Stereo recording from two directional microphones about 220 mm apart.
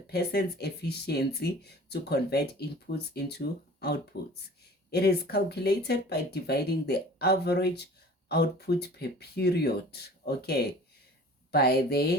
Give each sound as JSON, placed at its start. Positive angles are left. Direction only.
{"t": 0.1, "sound": "speech", "side_deg": 45}